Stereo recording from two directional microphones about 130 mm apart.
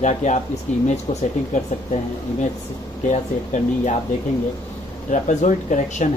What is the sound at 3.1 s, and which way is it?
Speech, 65° left (ahead or behind).